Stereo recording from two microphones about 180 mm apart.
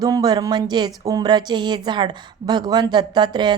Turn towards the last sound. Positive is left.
turn(degrees=-25)  # may be behind; listen again after turning